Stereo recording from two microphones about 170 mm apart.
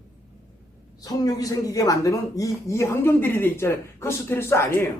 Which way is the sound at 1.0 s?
20° left (ahead or behind).